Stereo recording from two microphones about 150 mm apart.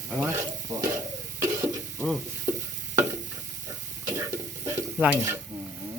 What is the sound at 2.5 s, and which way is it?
Stir, 15° right (ahead or behind).